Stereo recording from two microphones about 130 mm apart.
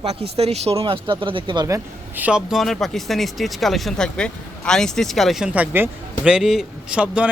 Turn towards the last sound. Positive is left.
turn(degrees=-10)  # may be behind; listen again after turning